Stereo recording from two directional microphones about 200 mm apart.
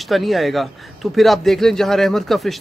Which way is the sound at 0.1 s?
Centre (ahead or behind).